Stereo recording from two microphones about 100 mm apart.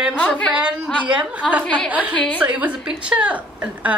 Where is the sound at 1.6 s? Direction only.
10° left (ahead or behind).